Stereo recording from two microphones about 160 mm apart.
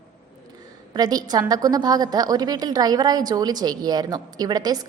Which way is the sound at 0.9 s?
25° right (ahead or behind).